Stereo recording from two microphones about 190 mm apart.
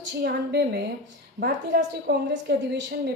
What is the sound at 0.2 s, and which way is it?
A woman's voice, 60° right (ahead or behind).